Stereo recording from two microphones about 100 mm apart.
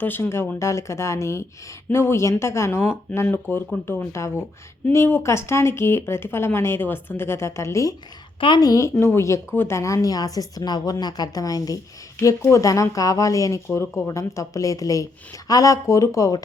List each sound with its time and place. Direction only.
0.0 s speech: 25° left (ahead or behind)
8.4 s a woman's voice: 55° left (ahead or behind)
8.6 s speech: 35° left (ahead or behind)